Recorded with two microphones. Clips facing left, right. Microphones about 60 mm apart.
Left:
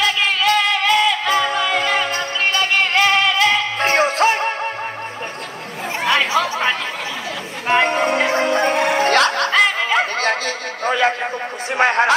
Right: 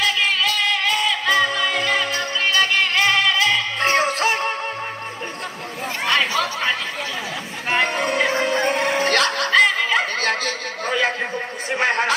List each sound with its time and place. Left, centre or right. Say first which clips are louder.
0.0 s music: left 3 dB; left
6.0 s chatter: left 3 dB; left
7.6 s music: left 5 dB; left
8.5 s music: left 3 dB; left
8.7 s music: left 3 dB; left
9.1 s music: left 2 dB; left
11.7 s speech: left 4 dB; left